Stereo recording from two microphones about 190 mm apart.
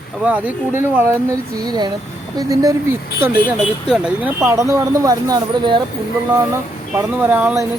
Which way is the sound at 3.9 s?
5° right (ahead or behind).